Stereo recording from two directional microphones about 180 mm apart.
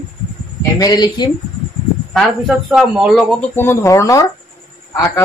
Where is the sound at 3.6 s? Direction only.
15° left (ahead or behind).